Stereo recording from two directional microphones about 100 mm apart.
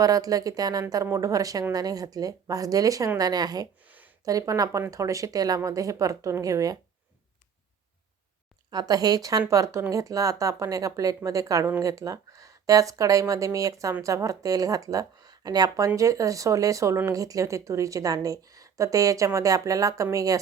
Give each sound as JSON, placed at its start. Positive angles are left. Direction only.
{"t": 0.0, "sound": "a woman's voice", "side_deg": -35}
{"t": 3.8, "sound": "a sound", "side_deg": -15}
{"t": 4.3, "sound": "a woman's voice", "side_deg": -35}
{"t": 8.7, "sound": "a woman's voice", "side_deg": -40}